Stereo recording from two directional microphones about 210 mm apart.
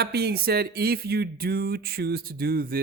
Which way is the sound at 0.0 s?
50° right (ahead or behind).